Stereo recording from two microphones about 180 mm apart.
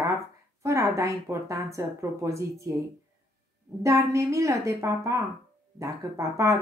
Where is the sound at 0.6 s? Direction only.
15° right (ahead or behind).